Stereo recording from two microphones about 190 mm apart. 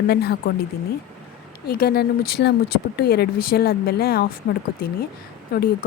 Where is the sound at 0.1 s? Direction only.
55° left (ahead or behind).